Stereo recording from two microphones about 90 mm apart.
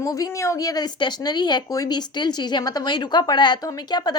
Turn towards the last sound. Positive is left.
turn(degrees=50)  # may be behind; listen again after turning